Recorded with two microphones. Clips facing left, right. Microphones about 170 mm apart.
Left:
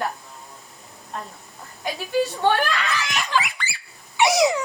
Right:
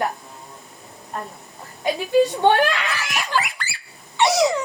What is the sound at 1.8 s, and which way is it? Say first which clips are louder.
Speech: right 6 dB; 20° right (ahead or behind).